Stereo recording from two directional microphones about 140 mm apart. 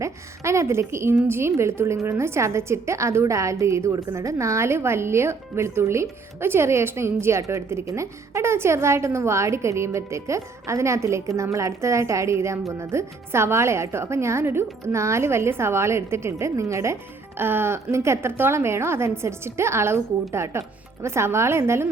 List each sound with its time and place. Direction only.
0.0 s a woman's voice: 20° right (ahead or behind)